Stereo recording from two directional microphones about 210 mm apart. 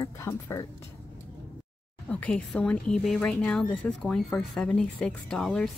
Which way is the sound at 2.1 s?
5° left (ahead or behind).